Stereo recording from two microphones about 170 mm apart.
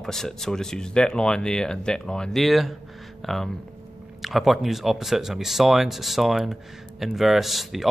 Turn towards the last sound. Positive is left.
turn(degrees=0)  # may be behind; listen again after turning